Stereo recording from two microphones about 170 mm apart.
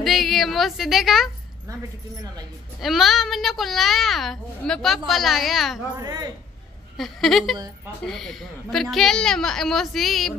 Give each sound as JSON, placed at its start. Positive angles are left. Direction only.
{"t": 0.0, "sound": "a woman's voice", "side_deg": 0}
{"t": 2.8, "sound": "a child's voice", "side_deg": 0}
{"t": 5.9, "sound": "a woman's voice", "side_deg": -20}
{"t": 7.0, "sound": "a child's voice", "side_deg": 0}